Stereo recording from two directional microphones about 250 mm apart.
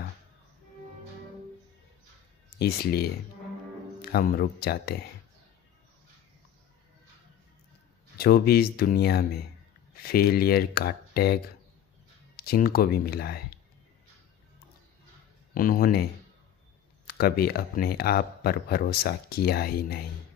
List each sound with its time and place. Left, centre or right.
2.6 s speech: left
8.2 s speech: left
15.5 s speech: left